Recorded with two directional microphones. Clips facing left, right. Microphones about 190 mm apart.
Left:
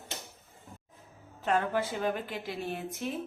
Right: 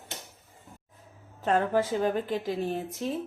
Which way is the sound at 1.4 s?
40° right (ahead or behind).